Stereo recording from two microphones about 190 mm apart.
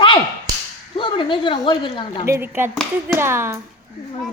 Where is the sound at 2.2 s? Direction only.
10° right (ahead or behind).